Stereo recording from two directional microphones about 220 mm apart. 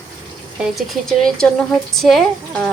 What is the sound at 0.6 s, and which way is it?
Speech, centre (ahead or behind).